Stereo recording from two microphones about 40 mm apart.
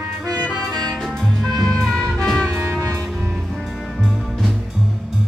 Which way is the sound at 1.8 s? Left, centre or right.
Centre.